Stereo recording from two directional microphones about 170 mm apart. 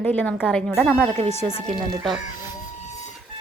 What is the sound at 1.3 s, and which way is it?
Speech, 35° left (ahead or behind).